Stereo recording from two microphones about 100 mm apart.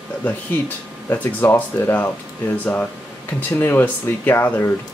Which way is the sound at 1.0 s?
20° left (ahead or behind).